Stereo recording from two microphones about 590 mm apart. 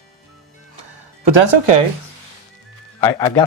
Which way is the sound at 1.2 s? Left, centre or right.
Right.